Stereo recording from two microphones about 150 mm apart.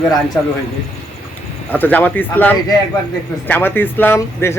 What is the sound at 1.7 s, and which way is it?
Speech, 10° left (ahead or behind).